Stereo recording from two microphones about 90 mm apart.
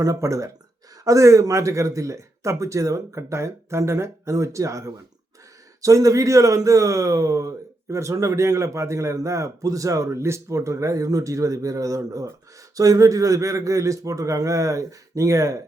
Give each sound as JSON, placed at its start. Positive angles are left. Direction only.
{"t": 0.0, "sound": "speech", "side_deg": -35}
{"t": 5.8, "sound": "speech", "side_deg": -40}